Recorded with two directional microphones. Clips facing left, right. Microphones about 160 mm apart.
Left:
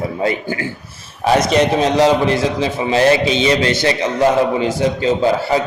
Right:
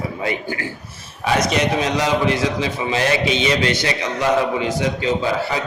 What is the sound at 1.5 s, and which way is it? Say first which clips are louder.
A man's voice: left 5 dB; 30° left (ahead or behind).